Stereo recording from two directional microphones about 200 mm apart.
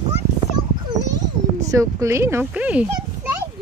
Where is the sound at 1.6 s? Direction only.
15° right (ahead or behind).